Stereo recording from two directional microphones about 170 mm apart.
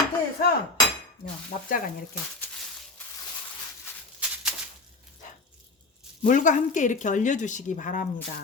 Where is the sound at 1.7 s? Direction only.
55° left (ahead or behind).